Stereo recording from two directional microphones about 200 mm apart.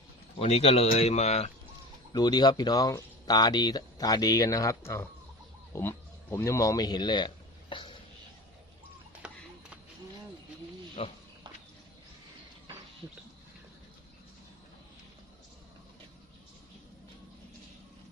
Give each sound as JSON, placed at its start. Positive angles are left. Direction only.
{"t": 0.3, "sound": "speech", "side_deg": 30}
{"t": 2.1, "sound": "speech", "side_deg": 20}
{"t": 11.0, "sound": "speech", "side_deg": 30}